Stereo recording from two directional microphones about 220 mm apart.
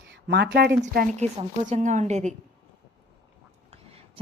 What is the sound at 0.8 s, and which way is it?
Speech, 40° right (ahead or behind).